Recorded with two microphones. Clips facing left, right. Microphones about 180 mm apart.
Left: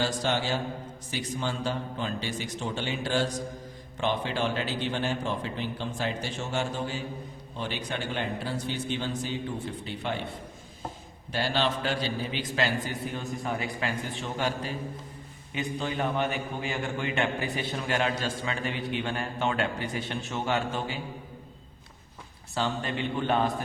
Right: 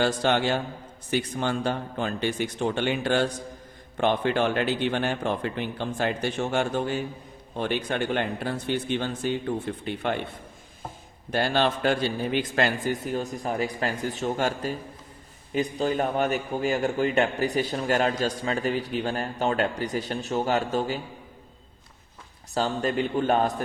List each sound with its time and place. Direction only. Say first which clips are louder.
0.0 s speech: right 5 dB; 60° right (ahead or behind)
11.3 s a man's voice: right 4 dB; 50° right (ahead or behind)
22.5 s a man's voice: right 5 dB; 40° right (ahead or behind)